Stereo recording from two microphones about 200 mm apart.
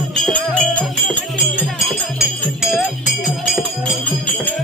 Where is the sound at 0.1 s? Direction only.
5° left (ahead or behind).